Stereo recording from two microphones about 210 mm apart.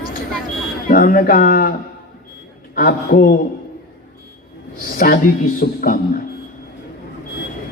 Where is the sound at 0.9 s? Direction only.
40° left (ahead or behind).